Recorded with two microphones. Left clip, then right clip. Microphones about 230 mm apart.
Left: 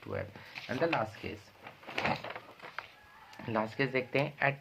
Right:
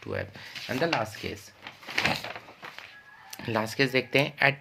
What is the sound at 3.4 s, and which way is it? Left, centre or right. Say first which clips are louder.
Speech: right 6 dB; right.